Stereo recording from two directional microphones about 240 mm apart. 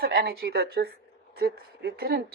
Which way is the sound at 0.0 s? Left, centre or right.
Right.